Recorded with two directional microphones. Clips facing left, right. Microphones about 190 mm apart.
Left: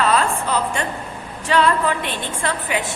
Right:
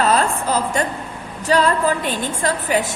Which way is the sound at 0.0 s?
40° right (ahead or behind).